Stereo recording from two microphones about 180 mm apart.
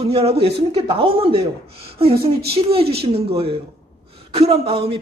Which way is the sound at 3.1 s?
35° right (ahead or behind).